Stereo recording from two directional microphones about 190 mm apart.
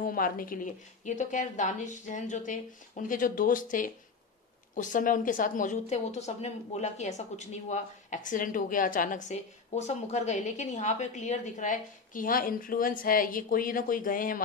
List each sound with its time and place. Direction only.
0.0 s a woman's voice: 50° left (ahead or behind)